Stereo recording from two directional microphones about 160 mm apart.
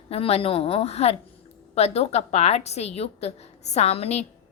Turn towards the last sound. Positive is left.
turn(degrees=40)  # may be behind; listen again after turning